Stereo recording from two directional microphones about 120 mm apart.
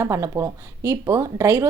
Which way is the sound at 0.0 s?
25° right (ahead or behind).